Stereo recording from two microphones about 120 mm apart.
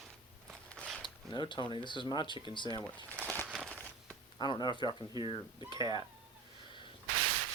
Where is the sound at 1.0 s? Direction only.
40° left (ahead or behind).